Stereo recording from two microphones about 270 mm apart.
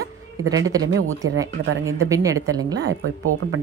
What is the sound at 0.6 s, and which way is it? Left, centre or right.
A woman's voice, centre.